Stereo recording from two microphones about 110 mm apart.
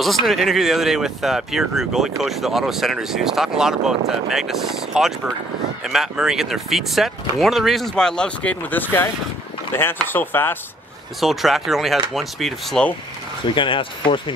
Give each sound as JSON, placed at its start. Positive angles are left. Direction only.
{"t": 0.0, "sound": "speech", "side_deg": 0}
{"t": 11.1, "sound": "speech", "side_deg": 0}
{"t": 13.6, "sound": "speech", "side_deg": 50}